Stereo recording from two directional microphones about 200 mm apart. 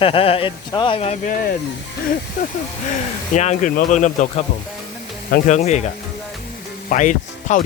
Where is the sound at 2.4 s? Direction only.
45° left (ahead or behind).